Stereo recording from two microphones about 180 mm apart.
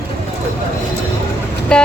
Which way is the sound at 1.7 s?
5° left (ahead or behind).